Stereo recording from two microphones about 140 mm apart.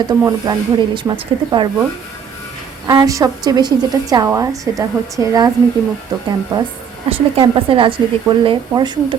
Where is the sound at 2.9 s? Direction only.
25° right (ahead or behind).